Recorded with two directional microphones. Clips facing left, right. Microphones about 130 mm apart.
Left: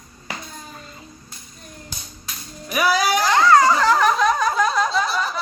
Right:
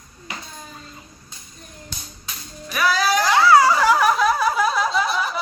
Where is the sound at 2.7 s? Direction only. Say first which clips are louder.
Left 1 dB; 10° left (ahead or behind).